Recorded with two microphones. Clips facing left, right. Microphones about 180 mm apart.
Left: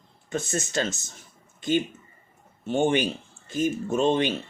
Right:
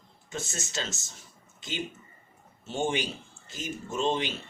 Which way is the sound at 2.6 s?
60° left (ahead or behind).